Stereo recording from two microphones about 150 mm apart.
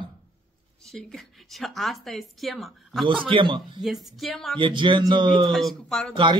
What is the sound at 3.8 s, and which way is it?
Speech, centre (ahead or behind).